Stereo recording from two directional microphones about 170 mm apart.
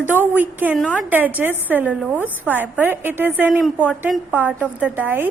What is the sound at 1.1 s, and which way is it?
A woman's voice, 10° right (ahead or behind).